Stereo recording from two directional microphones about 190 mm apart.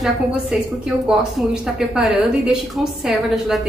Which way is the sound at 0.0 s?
Centre (ahead or behind).